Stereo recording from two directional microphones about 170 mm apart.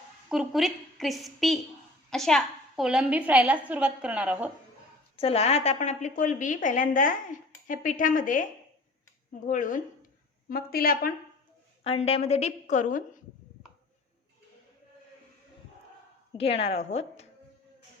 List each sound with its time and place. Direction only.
0.3 s a woman's voice: centre (ahead or behind)
5.1 s a woman's voice: 35° left (ahead or behind); by 8.4 s 50° left (ahead or behind)
9.5 s a woman's voice: 50° left (ahead or behind)
10.5 s a woman's voice: 60° left (ahead or behind)
11.8 s a woman's voice: 35° left (ahead or behind)
16.4 s a woman's voice: 35° left (ahead or behind)